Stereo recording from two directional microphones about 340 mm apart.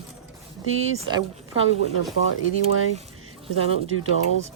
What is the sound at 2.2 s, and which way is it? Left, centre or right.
Speech, left.